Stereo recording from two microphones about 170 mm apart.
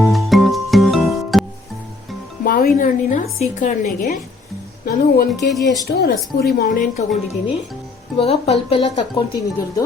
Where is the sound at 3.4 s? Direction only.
45° left (ahead or behind).